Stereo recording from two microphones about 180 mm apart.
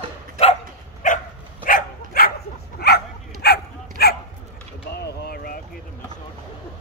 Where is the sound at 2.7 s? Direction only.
60° left (ahead or behind).